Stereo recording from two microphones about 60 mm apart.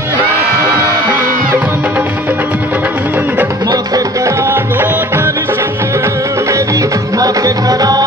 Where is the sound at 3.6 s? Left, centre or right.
Right.